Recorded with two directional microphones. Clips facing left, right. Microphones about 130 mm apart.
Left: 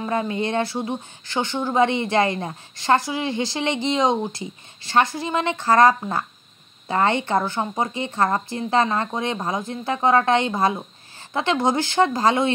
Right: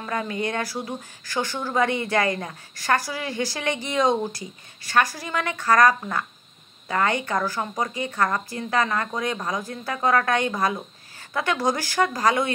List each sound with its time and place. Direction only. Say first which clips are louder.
0.0 s speech: left 4 dB; 25° left (ahead or behind)